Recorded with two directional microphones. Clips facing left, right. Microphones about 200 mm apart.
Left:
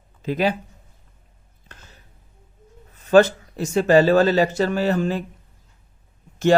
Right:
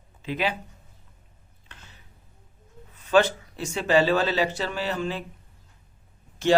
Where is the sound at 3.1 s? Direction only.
45° left (ahead or behind).